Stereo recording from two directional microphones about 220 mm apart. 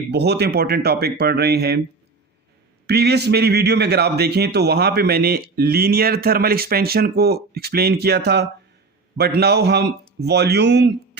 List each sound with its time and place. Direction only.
0.1 s speech: 50° right (ahead or behind)
2.8 s speech: 50° right (ahead or behind)